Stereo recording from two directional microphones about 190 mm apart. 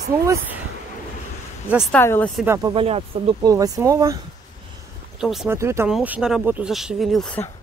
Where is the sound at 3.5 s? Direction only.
20° right (ahead or behind).